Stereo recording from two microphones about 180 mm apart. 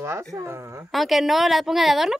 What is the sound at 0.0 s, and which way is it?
Speech, 15° right (ahead or behind).